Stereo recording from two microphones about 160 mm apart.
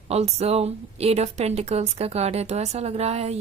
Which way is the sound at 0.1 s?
40° right (ahead or behind).